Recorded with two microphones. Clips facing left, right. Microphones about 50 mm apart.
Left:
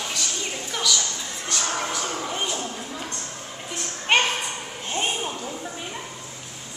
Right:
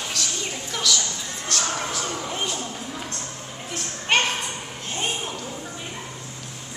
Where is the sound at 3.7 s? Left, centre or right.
Centre.